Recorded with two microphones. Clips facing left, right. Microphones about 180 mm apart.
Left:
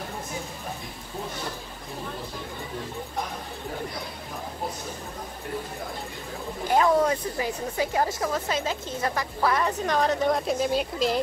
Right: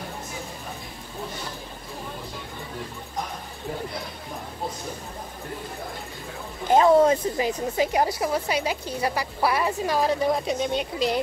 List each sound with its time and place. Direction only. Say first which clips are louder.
6.7 s speech: right 5 dB; 25° right (ahead or behind); by 11.1 s centre (ahead or behind)